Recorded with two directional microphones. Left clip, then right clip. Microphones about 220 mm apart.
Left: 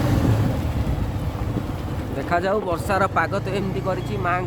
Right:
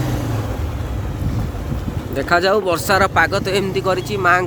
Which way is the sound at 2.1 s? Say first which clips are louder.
Right 7 dB; 25° right (ahead or behind).